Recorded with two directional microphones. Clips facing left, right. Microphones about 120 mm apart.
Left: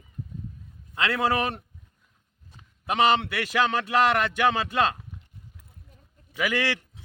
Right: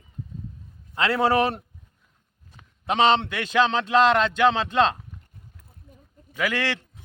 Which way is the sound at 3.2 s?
10° left (ahead or behind).